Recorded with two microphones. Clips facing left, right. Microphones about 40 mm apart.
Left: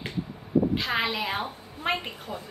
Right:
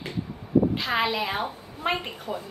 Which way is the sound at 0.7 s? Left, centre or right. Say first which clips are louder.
Right 1 dB; centre.